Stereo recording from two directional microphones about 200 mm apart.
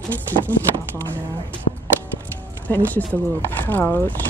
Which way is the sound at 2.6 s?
10° left (ahead or behind).